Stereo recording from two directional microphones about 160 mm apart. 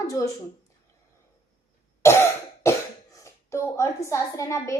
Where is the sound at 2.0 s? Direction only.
15° left (ahead or behind).